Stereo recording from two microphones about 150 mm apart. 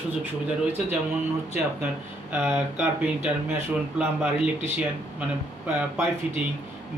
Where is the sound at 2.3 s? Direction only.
15° right (ahead or behind).